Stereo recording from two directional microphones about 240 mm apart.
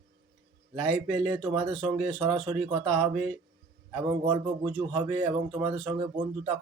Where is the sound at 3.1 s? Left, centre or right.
Centre.